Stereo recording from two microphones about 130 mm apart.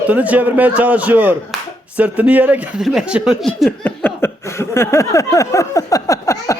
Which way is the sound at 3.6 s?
15° left (ahead or behind).